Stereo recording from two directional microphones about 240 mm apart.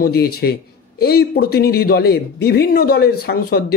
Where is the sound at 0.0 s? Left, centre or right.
Left.